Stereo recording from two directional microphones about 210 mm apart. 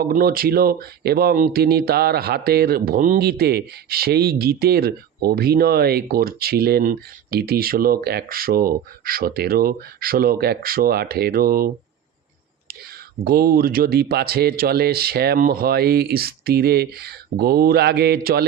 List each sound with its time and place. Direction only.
0.0 s speech: 45° right (ahead or behind)
13.2 s speech: 45° right (ahead or behind)